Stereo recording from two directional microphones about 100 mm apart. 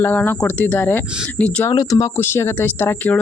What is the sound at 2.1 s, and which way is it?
Speech, 25° left (ahead or behind).